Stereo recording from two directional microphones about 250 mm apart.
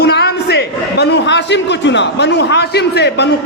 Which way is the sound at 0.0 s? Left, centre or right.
Left.